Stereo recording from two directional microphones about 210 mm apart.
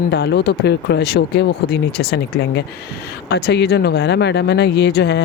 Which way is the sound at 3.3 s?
50° left (ahead or behind).